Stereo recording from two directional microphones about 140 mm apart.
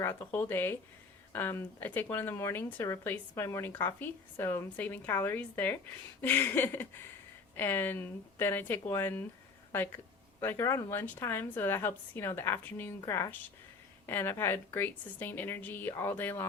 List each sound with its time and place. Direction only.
0.0 s speech: 15° left (ahead or behind)